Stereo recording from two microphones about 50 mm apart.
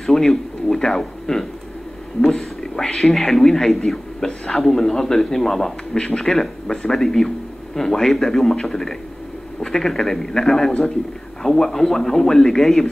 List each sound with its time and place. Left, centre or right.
0.0 s a man's voice: centre
4.3 s a man's voice: centre
4.6 s a man's voice: centre